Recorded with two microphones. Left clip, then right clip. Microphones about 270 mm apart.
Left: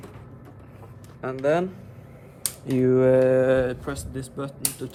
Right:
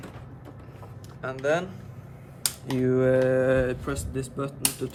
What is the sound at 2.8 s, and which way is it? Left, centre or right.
Speech, centre.